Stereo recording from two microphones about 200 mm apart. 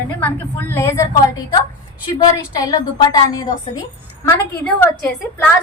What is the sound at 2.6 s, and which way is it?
A woman's voice, 20° left (ahead or behind).